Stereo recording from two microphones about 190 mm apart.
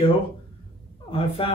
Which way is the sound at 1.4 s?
30° left (ahead or behind).